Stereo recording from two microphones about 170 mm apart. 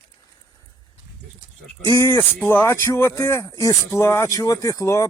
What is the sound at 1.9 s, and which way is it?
Speech, 20° left (ahead or behind).